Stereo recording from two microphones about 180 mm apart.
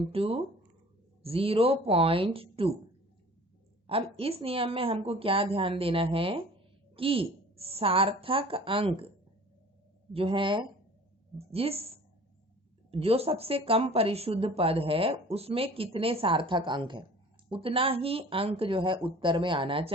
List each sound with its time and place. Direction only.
0.0 s speech: 30° right (ahead or behind)
3.8 s speech: 30° right (ahead or behind)
10.1 s speech: 30° right (ahead or behind)